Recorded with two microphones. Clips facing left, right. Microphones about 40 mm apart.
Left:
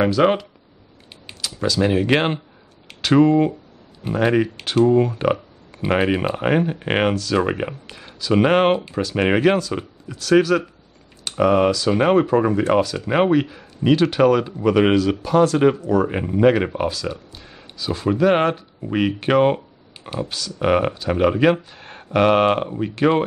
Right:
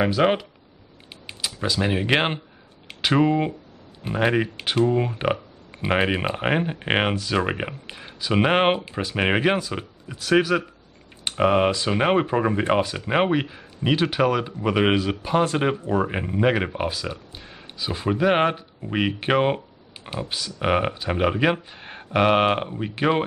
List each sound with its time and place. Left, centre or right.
0.2 s speech: centre
1.6 s speech: centre
11.2 s speech: right
16.1 s speech: centre